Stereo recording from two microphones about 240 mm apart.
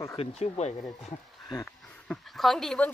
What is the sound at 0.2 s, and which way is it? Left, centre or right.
Speech, left.